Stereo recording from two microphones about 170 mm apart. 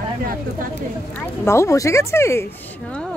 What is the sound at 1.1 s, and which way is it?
Speech, 15° left (ahead or behind).